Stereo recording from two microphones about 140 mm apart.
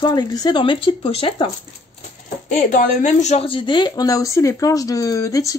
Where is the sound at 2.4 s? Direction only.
60° left (ahead or behind).